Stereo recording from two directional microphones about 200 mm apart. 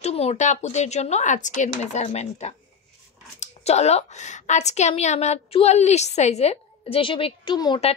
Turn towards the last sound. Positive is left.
turn(degrees=25)  # may be behind; listen again after turning